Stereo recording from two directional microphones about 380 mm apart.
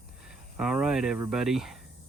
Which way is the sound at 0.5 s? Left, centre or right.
Centre.